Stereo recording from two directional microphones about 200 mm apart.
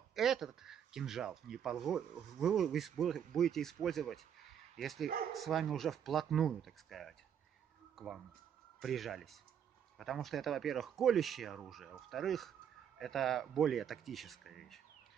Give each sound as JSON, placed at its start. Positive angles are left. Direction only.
{"t": 0.1, "sound": "speech", "side_deg": 0}
{"t": 7.9, "sound": "a sound", "side_deg": 0}
{"t": 8.7, "sound": "speech", "side_deg": 0}